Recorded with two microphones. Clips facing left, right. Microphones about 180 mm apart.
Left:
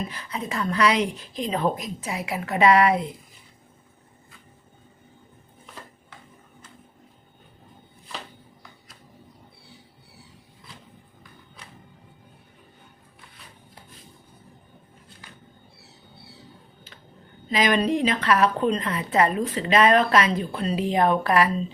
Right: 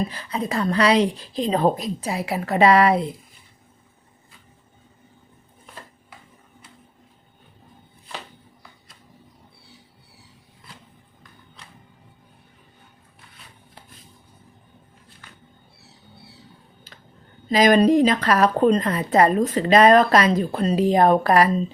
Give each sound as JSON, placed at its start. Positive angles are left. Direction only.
{"t": 0.1, "sound": "speech", "side_deg": -30}
{"t": 17.5, "sound": "speech", "side_deg": -40}